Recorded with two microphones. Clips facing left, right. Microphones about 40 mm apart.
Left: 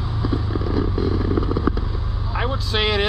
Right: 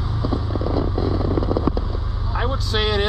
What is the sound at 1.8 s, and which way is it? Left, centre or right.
Vehicle, centre.